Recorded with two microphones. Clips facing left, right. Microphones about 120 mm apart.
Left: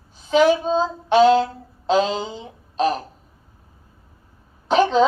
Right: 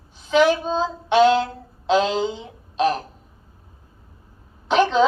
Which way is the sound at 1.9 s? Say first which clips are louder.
Even; 40° left (ahead or behind).